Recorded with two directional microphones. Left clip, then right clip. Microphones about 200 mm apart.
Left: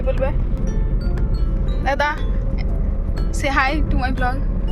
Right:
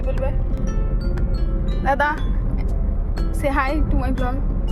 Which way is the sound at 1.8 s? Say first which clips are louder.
Right 1 dB; 20° right (ahead or behind).